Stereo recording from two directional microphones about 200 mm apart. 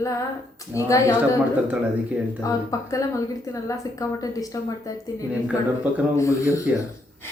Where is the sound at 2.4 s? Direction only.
15° left (ahead or behind).